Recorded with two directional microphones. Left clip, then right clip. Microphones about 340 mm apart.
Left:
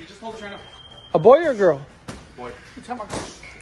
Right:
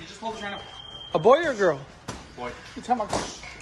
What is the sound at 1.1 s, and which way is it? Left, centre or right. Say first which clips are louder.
Speech: left 5 dB; centre.